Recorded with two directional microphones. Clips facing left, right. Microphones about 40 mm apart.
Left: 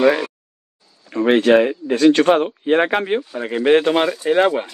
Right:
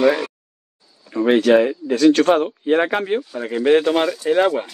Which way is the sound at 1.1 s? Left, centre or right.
Left.